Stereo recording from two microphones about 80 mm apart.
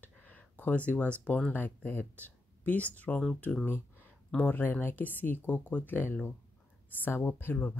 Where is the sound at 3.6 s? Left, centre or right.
Left.